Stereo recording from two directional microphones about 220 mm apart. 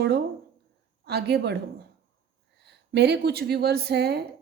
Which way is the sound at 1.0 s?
45° right (ahead or behind).